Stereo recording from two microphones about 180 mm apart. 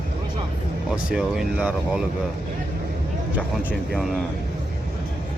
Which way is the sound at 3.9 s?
5° right (ahead or behind).